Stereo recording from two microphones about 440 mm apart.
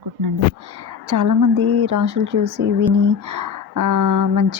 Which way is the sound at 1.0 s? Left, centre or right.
Right.